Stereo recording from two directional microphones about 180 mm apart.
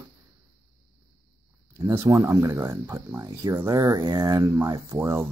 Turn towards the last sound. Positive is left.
turn(degrees=-20)  # may be behind; listen again after turning